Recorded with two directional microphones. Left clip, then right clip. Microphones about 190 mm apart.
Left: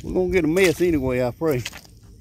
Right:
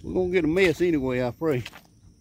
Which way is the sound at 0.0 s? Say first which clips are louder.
Left 3 dB; centre (ahead or behind).